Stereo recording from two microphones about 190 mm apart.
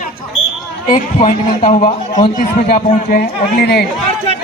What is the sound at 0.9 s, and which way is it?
Speech, 35° left (ahead or behind).